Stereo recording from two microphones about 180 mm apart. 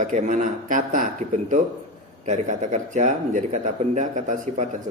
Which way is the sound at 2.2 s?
40° right (ahead or behind).